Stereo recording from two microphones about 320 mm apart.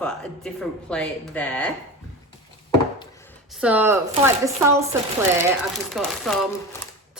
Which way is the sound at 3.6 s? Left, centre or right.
Centre.